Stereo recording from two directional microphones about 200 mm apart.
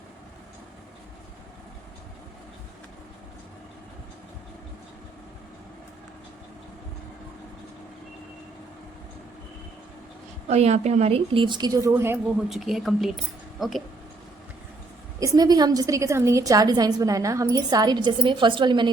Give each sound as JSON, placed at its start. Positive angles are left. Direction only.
{"t": 10.5, "sound": "a woman's voice", "side_deg": -35}
{"t": 12.5, "sound": "speech", "side_deg": 0}
{"t": 15.2, "sound": "a woman's voice", "side_deg": -15}